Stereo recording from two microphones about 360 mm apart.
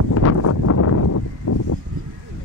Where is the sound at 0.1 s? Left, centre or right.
Left.